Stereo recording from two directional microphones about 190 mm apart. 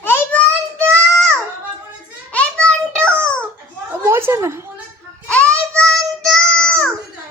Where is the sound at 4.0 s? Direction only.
10° right (ahead or behind).